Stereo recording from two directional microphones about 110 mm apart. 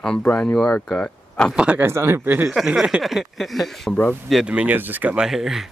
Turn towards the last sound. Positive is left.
turn(degrees=0)  # may be behind; listen again after turning